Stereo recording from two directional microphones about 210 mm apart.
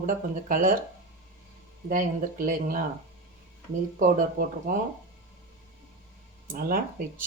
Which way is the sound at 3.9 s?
40° right (ahead or behind).